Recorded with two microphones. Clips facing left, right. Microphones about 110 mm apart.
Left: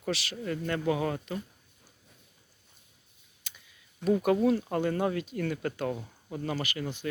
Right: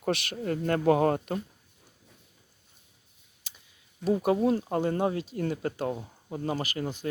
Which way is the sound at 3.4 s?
35° right (ahead or behind).